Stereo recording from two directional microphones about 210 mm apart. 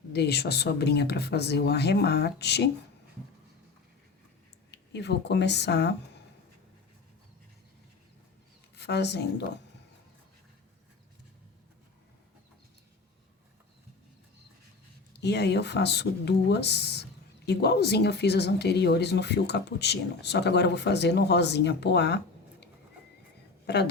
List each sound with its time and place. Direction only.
0.1 s speech: 50° left (ahead or behind)
4.7 s speech: 55° left (ahead or behind)
8.7 s a woman's voice: 55° left (ahead or behind)
15.1 s speech: 55° left (ahead or behind)
23.6 s a woman's voice: 50° left (ahead or behind)